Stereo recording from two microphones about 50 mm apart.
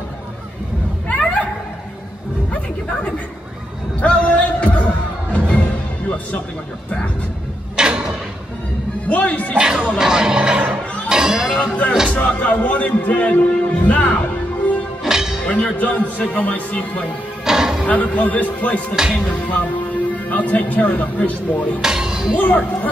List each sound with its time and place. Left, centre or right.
4.0 s music: left
7.7 s a sound: centre
9.1 s speech: left
9.6 s speech: centre
11.1 s a sound: centre
11.5 s speech: left
15.0 s music: centre
15.4 s speech: left
17.5 s music: centre
17.8 s speech: left
21.8 s music: centre
22.4 s speech: left